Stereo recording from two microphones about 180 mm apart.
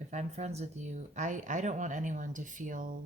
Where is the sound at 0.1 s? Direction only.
40° right (ahead or behind).